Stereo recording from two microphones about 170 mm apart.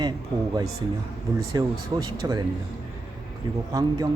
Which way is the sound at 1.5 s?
25° right (ahead or behind).